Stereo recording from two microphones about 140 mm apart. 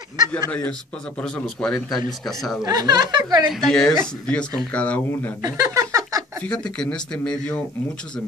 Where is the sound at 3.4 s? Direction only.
Centre (ahead or behind).